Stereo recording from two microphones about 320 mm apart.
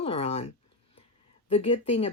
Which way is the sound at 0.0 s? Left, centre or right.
Centre.